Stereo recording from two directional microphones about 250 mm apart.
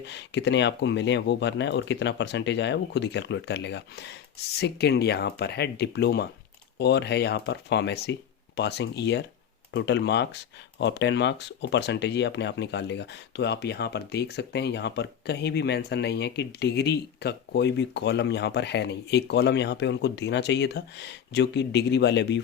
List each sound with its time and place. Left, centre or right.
0.0 s speech: left